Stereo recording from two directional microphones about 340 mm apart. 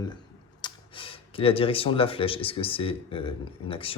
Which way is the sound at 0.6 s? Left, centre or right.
Centre.